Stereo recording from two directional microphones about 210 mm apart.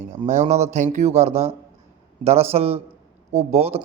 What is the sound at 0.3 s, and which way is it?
Speech, 35° right (ahead or behind).